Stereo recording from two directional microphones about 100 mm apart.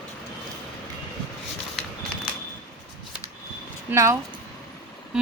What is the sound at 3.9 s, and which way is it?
Speech, 20° right (ahead or behind).